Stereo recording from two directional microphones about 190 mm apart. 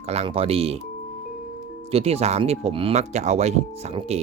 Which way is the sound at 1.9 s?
35° right (ahead or behind).